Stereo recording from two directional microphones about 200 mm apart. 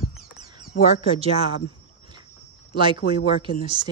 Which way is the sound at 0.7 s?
40° left (ahead or behind).